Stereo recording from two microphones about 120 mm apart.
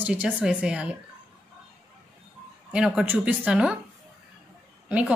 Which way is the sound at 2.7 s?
5° right (ahead or behind).